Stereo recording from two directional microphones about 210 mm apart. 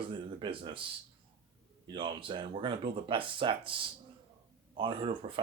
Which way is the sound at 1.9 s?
25° right (ahead or behind).